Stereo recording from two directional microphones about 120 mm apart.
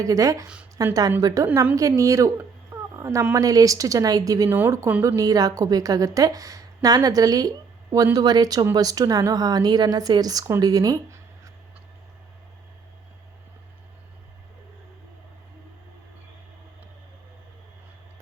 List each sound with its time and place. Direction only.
0.0 s a woman's voice: 30° right (ahead or behind)
2.9 s a sound: 25° right (ahead or behind)
3.3 s a woman's voice: 30° right (ahead or behind)